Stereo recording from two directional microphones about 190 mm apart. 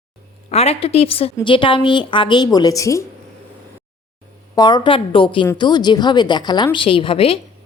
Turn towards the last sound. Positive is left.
turn(degrees=30)  # may be behind; listen again after turning